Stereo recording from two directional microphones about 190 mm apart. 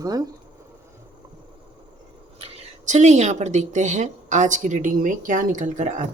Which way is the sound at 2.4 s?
40° right (ahead or behind).